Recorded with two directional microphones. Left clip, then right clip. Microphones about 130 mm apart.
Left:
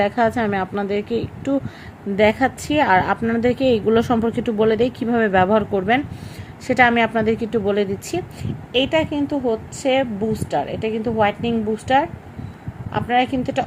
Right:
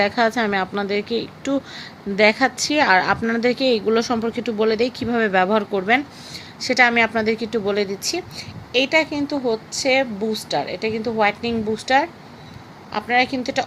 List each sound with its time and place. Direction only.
0.0 s a woman's voice: 20° left (ahead or behind); by 13.7 s 35° left (ahead or behind)